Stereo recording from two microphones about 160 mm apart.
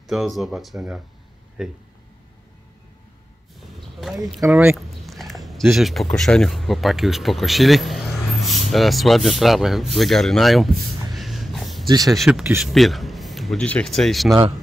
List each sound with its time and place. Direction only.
0.0 s speech: centre (ahead or behind)
4.4 s speech: 15° right (ahead or behind)
4.7 s speech: centre (ahead or behind)
11.1 s a sound: centre (ahead or behind)
12.1 s speech: centre (ahead or behind)